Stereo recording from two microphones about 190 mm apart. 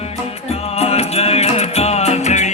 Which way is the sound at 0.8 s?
30° left (ahead or behind).